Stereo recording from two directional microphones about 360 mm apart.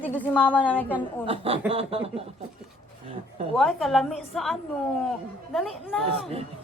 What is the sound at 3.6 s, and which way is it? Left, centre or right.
Speech, centre.